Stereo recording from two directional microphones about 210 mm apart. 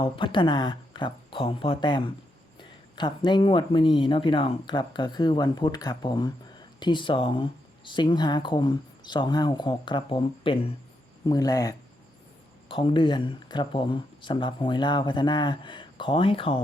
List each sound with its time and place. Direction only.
0.0 s speech: 25° left (ahead or behind)